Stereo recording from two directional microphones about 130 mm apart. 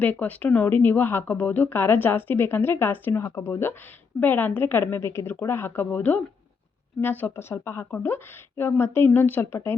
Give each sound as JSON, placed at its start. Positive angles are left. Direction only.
{"t": 0.0, "sound": "speech", "side_deg": 10}